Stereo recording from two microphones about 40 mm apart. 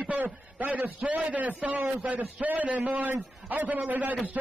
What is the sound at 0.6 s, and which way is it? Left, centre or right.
A man's voice, right.